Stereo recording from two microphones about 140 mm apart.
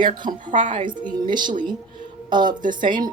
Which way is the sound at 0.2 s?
70° right (ahead or behind).